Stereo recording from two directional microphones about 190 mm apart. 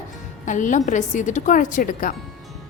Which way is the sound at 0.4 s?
40° left (ahead or behind).